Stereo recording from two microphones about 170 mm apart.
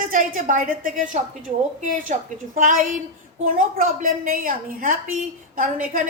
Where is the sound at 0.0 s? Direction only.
55° right (ahead or behind).